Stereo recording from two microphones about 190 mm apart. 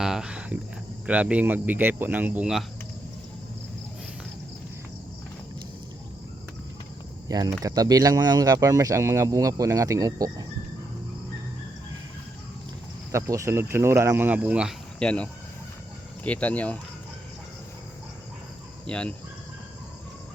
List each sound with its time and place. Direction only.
0.0 s cricket: 5° right (ahead or behind)
1.0 s speech: 5° right (ahead or behind)
7.3 s speech: 20° right (ahead or behind)
13.1 s speech: 15° right (ahead or behind); by 16.7 s 5° left (ahead or behind)
18.9 s speech: 5° left (ahead or behind)